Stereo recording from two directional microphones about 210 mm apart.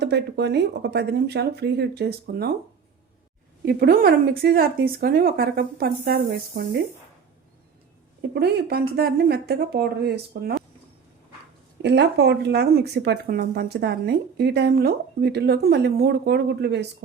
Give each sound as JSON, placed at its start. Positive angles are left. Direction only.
{"t": 0.0, "sound": "speech", "side_deg": -50}
{"t": 3.7, "sound": "speech", "side_deg": -45}
{"t": 8.3, "sound": "speech", "side_deg": -50}
{"t": 11.8, "sound": "speech", "side_deg": -55}